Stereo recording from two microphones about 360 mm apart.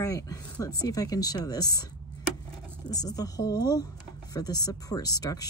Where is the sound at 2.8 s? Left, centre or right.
Centre.